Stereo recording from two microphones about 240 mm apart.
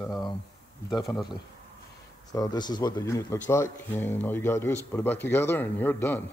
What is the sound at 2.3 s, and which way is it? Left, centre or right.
Speech, centre.